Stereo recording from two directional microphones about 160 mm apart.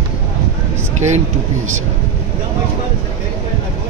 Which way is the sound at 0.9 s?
45° right (ahead or behind).